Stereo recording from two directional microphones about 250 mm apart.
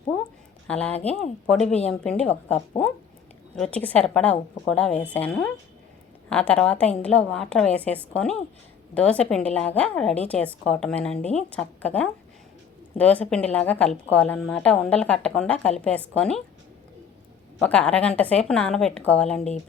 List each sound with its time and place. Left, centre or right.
0.7 s a woman's voice: centre
11.2 s speech: left
11.5 s a woman's voice: centre
17.6 s a woman's voice: centre